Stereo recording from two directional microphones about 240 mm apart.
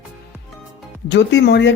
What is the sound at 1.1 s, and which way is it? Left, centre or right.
Speech, left.